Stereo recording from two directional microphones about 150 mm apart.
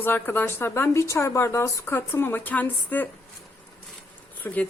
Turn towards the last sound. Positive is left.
turn(degrees=10)  # may be behind; listen again after turning